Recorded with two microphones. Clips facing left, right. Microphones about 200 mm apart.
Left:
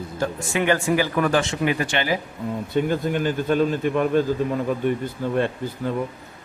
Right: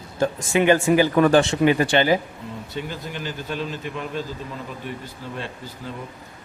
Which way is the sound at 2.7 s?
50° left (ahead or behind).